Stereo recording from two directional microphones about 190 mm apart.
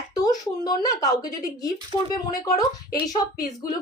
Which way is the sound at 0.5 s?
20° left (ahead or behind).